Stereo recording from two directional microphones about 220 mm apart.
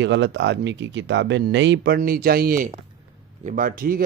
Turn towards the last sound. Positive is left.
turn(degrees=-40)  # may be behind; listen again after turning